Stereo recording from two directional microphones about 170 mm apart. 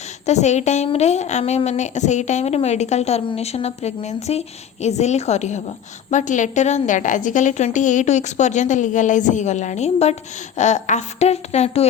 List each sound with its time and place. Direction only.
0.3 s a woman's voice: 40° left (ahead or behind)